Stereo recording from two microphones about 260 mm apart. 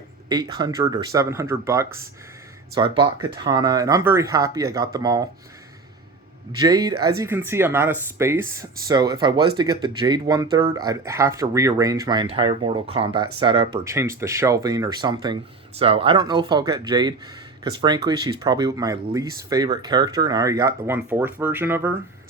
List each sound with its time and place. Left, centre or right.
0.3 s speech: centre
6.6 s speech: centre